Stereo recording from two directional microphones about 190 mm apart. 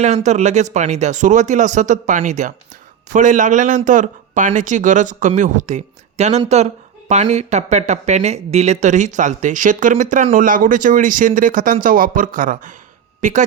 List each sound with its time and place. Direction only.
0.0 s speech: 35° right (ahead or behind)